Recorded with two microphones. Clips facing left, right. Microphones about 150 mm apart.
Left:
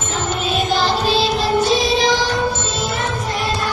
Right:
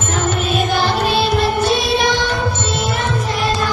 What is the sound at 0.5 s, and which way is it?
Music, 55° right (ahead or behind).